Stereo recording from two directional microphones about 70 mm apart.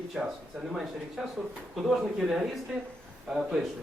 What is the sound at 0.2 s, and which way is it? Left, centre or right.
Speech, centre.